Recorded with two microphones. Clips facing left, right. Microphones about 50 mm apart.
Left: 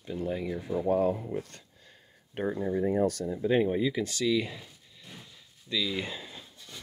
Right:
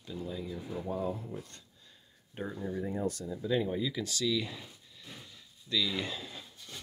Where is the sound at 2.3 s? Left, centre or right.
Left.